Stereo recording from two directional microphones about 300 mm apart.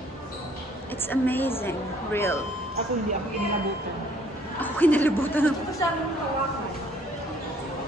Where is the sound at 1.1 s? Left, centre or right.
Centre.